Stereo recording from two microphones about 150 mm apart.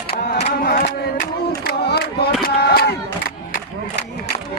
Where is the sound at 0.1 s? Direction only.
90° left.